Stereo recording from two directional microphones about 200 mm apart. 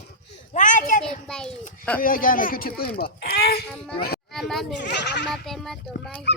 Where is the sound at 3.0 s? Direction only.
50° left (ahead or behind).